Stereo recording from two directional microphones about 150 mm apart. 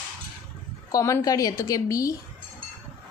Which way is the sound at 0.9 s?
20° left (ahead or behind).